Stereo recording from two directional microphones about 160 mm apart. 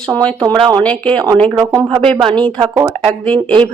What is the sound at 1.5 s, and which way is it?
Speech, 25° right (ahead or behind).